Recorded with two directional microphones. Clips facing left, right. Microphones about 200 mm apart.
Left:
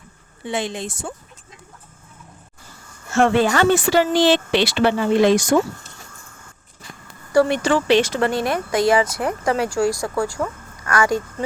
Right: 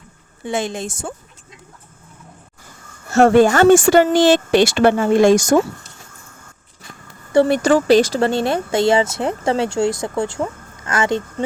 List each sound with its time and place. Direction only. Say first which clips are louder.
0.4 s speech: right 3 dB; 45° right (ahead or behind)
3.1 s speech: right 5 dB; 40° right (ahead or behind)
7.4 s speech: right 4 dB; 40° right (ahead or behind); by 11.4 s 25° right (ahead or behind)